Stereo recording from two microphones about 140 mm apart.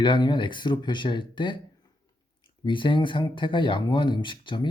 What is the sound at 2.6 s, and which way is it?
Speech, 35° left (ahead or behind).